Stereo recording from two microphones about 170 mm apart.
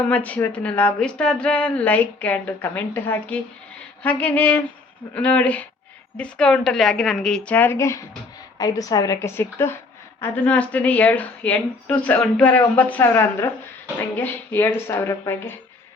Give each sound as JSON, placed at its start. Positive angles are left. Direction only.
{"t": 0.1, "sound": "a woman's voice", "side_deg": 10}